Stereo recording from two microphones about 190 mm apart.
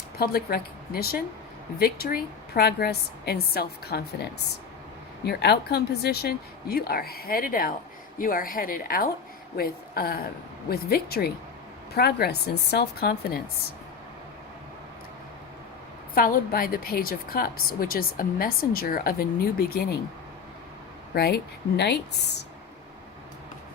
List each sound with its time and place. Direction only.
0.2 s a woman's voice: 55° left (ahead or behind)
5.2 s a woman's voice: 60° left (ahead or behind)
16.1 s a woman's voice: 50° left (ahead or behind)
21.1 s a woman's voice: 55° left (ahead or behind)